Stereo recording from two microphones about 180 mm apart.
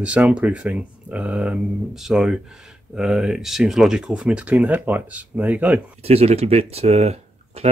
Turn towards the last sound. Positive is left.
turn(degrees=-35)  # may be behind; listen again after turning